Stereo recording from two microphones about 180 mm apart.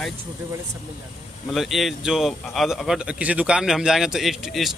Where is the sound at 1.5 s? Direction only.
Centre (ahead or behind).